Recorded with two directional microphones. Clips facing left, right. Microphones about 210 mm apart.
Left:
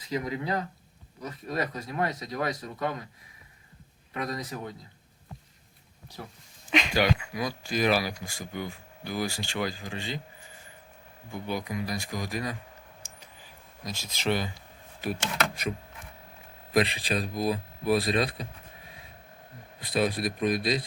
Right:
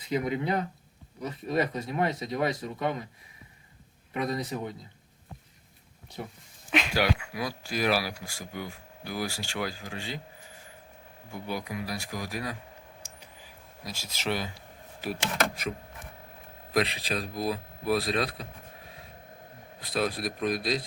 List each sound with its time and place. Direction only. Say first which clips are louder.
0.1 s speech: right 2 dB; 25° right (ahead or behind)
4.1 s speech: right 3 dB; 25° right (ahead or behind)
6.2 s speech: right 4 dB; 10° right (ahead or behind)
11.3 s speech: left 2 dB; 5° right (ahead or behind)
13.0 s a sound: right 1 dB; 10° right (ahead or behind)
13.8 s speech: left 3 dB; 5° right (ahead or behind)
16.7 s speech: left 2 dB; centre (ahead or behind)
19.8 s speech: left 3 dB; centre (ahead or behind)